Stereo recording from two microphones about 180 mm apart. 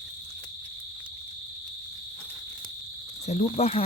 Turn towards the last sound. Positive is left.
turn(degrees=35)  # may be behind; listen again after turning